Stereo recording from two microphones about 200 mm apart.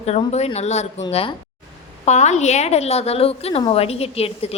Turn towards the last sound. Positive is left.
turn(degrees=30)  # may be behind; listen again after turning